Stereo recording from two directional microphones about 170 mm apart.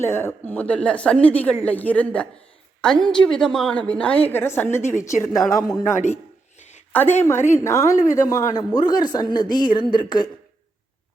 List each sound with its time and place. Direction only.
0.0 s a woman's voice: 15° left (ahead or behind)
6.6 s a sound: 40° left (ahead or behind)
7.2 s a woman's voice: 15° left (ahead or behind)